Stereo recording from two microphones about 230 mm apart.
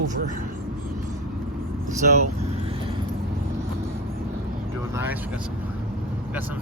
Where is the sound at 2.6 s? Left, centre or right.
Right.